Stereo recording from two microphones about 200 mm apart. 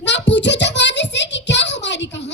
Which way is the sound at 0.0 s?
60° left (ahead or behind).